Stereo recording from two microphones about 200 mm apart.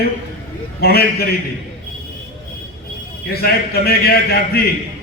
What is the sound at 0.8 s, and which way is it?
Speech, 50° left (ahead or behind).